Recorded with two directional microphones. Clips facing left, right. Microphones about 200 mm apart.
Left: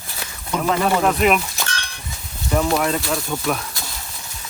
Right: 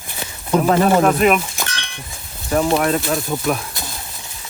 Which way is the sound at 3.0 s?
20° right (ahead or behind).